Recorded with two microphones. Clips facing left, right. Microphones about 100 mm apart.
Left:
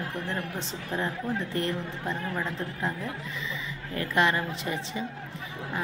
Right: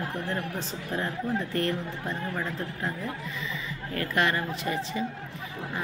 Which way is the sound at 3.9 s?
20° left (ahead or behind).